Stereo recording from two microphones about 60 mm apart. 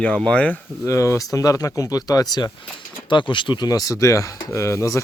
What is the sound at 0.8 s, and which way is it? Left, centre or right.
Speech, left.